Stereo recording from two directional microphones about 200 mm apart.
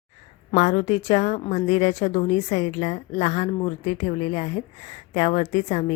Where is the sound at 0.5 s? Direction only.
35° left (ahead or behind).